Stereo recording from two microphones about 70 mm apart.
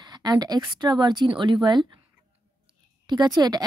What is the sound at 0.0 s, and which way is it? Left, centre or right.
Speech, right.